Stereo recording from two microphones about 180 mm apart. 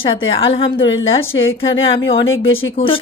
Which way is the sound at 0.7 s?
90° left.